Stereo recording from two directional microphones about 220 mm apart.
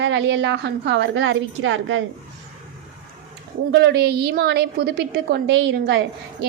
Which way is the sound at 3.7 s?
50° right (ahead or behind).